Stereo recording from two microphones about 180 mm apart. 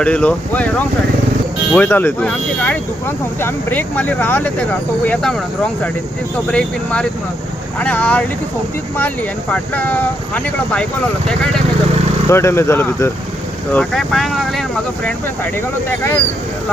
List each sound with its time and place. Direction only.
0.0 s speech: 5° left (ahead or behind)
1.7 s speech: 10° left (ahead or behind)
6.5 s speech: 5° left (ahead or behind)
12.3 s speech: 15° left (ahead or behind)
13.7 s speech: centre (ahead or behind)
15.9 s speech: 10° left (ahead or behind)